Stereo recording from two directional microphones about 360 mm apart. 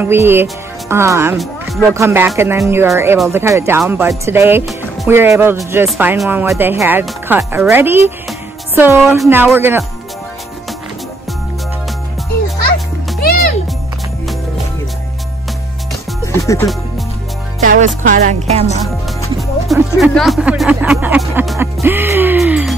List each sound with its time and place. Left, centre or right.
0.0 s speech: centre
13.2 s music: left
16.4 s speech: centre
17.6 s music: right
19.2 s speech: centre